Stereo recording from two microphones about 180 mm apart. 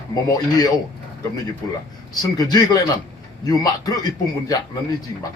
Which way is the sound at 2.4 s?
20° left (ahead or behind).